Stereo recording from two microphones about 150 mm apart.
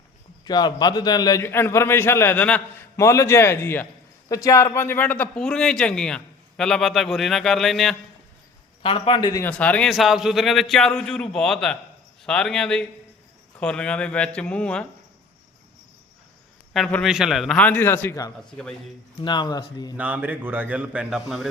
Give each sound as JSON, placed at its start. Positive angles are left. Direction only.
{"t": 0.4, "sound": "a man's voice", "side_deg": 30}
{"t": 8.8, "sound": "a man's voice", "side_deg": 35}
{"t": 9.4, "sound": "a man's voice", "side_deg": 10}
{"t": 9.9, "sound": "a man's voice", "side_deg": 0}
{"t": 16.7, "sound": "a man's voice", "side_deg": 0}
{"t": 17.7, "sound": "a man's voice", "side_deg": 15}
{"t": 18.5, "sound": "a man's voice", "side_deg": 5}
{"t": 19.2, "sound": "speech", "side_deg": 30}
{"t": 20.0, "sound": "a man's voice", "side_deg": -10}